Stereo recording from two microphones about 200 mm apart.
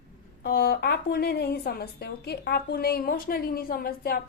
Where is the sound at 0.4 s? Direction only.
50° left (ahead or behind).